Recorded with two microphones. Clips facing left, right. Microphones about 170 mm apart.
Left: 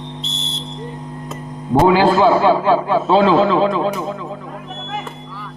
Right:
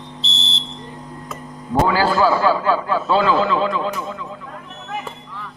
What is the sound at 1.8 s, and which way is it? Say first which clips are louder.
Speech: left 5 dB; 20° left (ahead or behind).